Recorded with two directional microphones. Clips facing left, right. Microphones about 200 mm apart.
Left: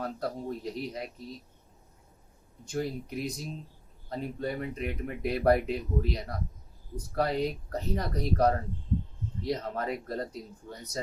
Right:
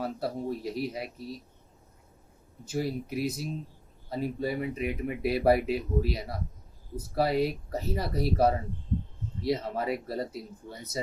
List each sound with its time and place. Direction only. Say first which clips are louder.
0.0 s speech: right 2 dB; 5° right (ahead or behind)
2.6 s speech: right 2 dB; 5° right (ahead or behind)